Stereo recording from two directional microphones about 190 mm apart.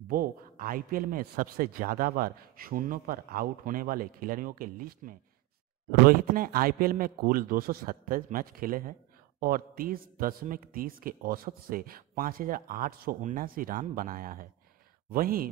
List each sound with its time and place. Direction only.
0.1 s a man's voice: 50° right (ahead or behind)